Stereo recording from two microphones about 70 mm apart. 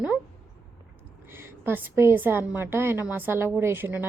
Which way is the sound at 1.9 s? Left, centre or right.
Right.